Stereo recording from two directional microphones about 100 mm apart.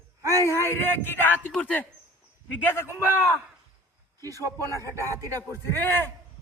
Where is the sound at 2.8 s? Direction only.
20° right (ahead or behind).